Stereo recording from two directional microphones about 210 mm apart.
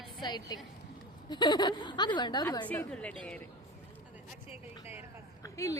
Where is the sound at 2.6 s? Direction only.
10° left (ahead or behind).